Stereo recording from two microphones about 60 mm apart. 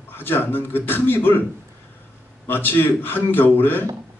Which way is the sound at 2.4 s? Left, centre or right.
Left.